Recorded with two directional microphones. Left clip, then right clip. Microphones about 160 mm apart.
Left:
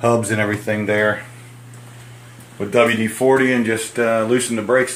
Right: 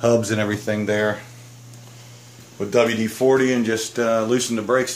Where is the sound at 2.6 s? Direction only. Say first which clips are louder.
Left 3 dB; 5° right (ahead or behind).